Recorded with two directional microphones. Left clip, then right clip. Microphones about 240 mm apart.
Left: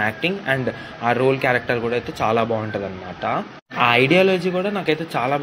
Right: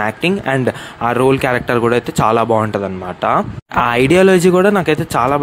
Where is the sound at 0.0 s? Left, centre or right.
Right.